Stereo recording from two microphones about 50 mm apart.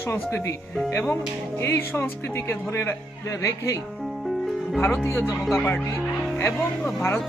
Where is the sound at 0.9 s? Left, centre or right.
Left.